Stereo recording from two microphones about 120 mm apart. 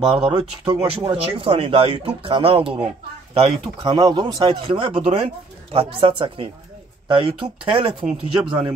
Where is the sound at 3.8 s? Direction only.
40° right (ahead or behind).